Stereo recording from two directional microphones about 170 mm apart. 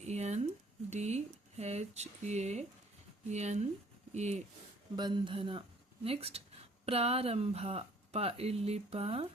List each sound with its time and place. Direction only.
0.0 s a sound: 40° right (ahead or behind)
0.9 s speech: 40° right (ahead or behind)
4.9 s speech: 30° right (ahead or behind)